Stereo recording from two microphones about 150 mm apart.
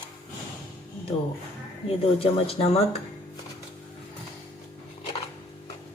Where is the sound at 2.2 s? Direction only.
40° left (ahead or behind).